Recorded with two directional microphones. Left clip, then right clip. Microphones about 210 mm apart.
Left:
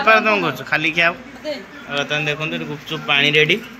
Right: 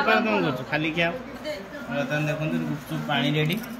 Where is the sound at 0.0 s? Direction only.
5° right (ahead or behind).